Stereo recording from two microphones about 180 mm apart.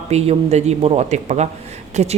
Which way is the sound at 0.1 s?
35° right (ahead or behind).